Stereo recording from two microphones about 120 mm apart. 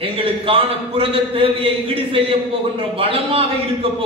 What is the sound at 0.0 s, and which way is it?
A man's voice, 50° right (ahead or behind).